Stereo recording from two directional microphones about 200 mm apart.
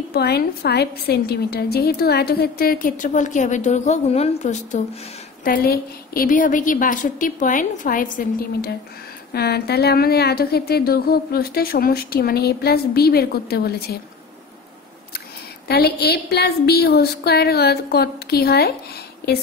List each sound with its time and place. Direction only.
0.1 s a woman's voice: 50° left (ahead or behind)
15.7 s a woman's voice: 50° left (ahead or behind)